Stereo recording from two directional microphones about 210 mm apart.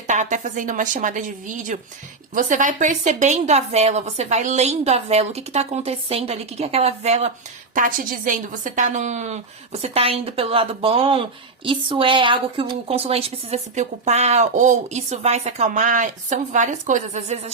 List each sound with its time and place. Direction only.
0.1 s a woman's voice: 35° right (ahead or behind)